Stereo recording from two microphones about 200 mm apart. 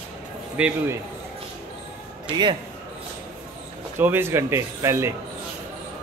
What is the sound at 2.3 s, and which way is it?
Speech, 20° right (ahead or behind).